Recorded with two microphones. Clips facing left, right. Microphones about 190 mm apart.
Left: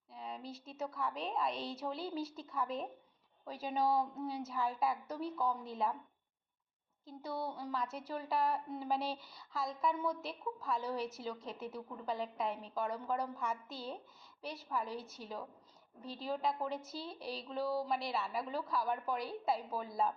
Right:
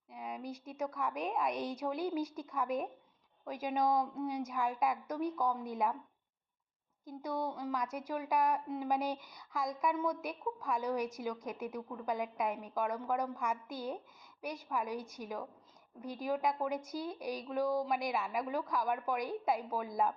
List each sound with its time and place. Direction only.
0.1 s a sound: 15° right (ahead or behind)
0.9 s a woman's voice: 15° right (ahead or behind)
7.0 s a woman's voice: 15° right (ahead or behind)